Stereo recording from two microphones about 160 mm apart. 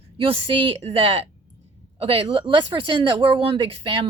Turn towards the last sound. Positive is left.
turn(degrees=-35)  # may be behind; listen again after turning